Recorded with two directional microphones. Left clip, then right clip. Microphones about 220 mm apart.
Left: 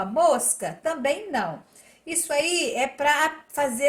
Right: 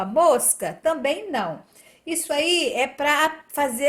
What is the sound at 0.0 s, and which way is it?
A woman's voice, 40° right (ahead or behind).